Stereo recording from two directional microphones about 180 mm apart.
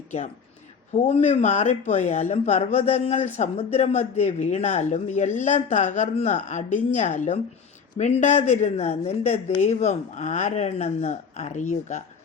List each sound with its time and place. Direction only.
0.9 s speech: 40° left (ahead or behind)